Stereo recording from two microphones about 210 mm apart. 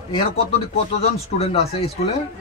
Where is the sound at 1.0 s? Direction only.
30° left (ahead or behind).